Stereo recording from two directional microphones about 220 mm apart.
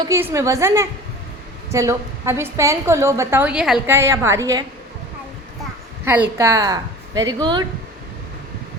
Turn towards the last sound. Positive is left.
turn(degrees=-20)  # may be behind; listen again after turning